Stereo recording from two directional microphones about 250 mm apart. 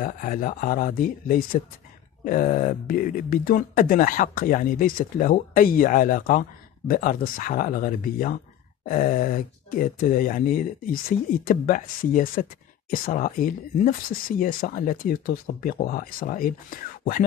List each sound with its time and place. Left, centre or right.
0.0 s speech: left